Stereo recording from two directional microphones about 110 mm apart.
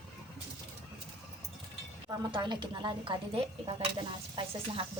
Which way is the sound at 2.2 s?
45° right (ahead or behind).